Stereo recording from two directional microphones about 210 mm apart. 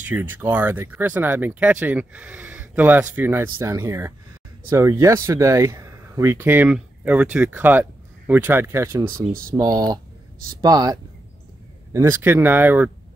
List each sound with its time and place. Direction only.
0.0 s speech: 10° right (ahead or behind)